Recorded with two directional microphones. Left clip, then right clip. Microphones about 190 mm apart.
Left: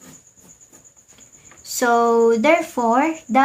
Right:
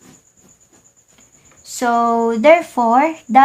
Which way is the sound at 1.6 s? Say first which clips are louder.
Right 1 dB; 15° right (ahead or behind).